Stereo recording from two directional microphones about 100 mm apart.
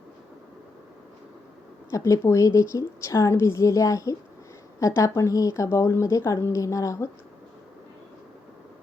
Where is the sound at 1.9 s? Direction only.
30° left (ahead or behind).